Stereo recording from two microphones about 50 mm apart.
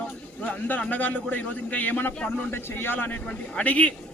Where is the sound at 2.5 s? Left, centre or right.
Left.